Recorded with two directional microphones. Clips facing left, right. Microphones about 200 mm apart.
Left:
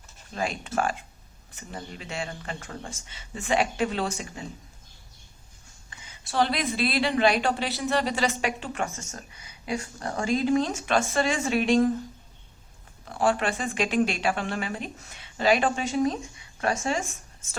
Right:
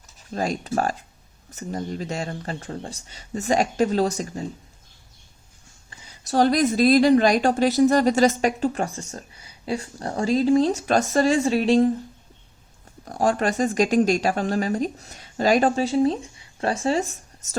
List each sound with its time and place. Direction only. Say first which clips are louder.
0.3 s speech: right 4 dB; 40° right (ahead or behind)
5.9 s a woman's voice: right 8 dB; 35° right (ahead or behind)
13.1 s speech: right 3 dB; 40° right (ahead or behind)